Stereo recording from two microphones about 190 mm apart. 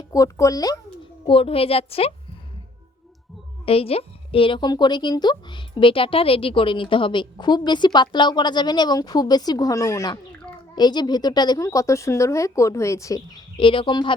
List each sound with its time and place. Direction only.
0.1 s speech: 15° left (ahead or behind)
1.3 s a woman's voice: 30° left (ahead or behind)
3.7 s a woman's voice: 30° left (ahead or behind)